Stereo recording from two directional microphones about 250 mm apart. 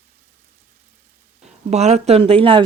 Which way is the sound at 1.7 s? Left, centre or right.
Right.